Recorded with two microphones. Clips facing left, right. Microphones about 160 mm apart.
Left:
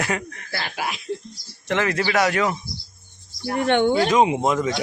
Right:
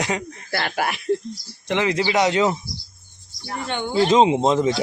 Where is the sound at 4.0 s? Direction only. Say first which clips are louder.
Right 2 dB; 25° right (ahead or behind).